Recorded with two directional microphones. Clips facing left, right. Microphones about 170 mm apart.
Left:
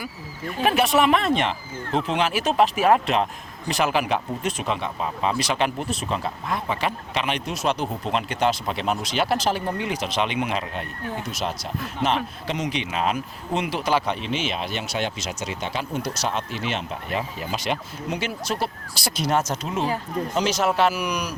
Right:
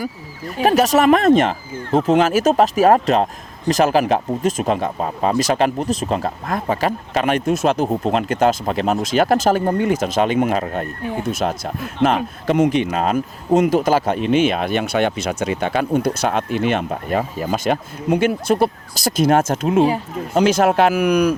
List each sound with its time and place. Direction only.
0.0 s speech: 40° right (ahead or behind)
19.8 s speech: 15° right (ahead or behind)
20.3 s speech: 55° right (ahead or behind)